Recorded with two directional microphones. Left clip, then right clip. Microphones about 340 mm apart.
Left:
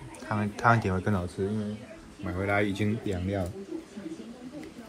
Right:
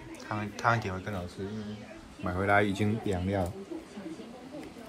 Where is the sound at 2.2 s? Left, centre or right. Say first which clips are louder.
Right 2 dB; centre.